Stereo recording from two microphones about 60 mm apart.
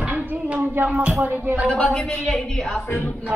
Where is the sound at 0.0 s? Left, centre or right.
Right.